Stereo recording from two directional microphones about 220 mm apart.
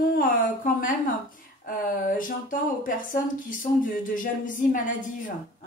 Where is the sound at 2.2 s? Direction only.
40° left (ahead or behind).